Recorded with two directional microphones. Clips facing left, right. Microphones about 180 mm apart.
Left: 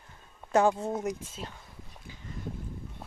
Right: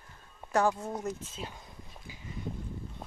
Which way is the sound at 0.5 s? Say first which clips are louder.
Left 4 dB; 25° left (ahead or behind).